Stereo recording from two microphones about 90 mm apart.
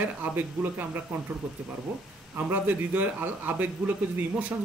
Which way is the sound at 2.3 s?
20° right (ahead or behind).